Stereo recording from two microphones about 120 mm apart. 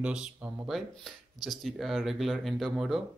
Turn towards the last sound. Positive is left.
turn(degrees=-5)  # may be behind; listen again after turning